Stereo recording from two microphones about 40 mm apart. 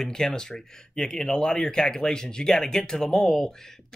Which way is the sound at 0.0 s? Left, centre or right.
Centre.